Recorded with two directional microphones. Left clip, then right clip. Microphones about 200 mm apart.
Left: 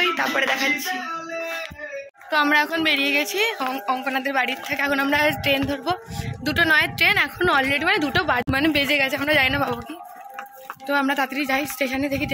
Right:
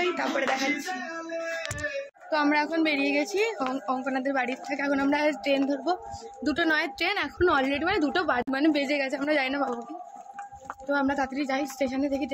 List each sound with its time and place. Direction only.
0.0 s speech: centre (ahead or behind)
2.3 s a woman's voice: 5° right (ahead or behind)
10.9 s a woman's voice: 10° left (ahead or behind)